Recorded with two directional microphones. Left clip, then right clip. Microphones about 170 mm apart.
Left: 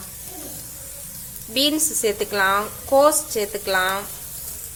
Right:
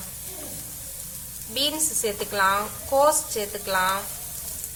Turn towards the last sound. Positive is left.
turn(degrees=35)  # may be behind; listen again after turning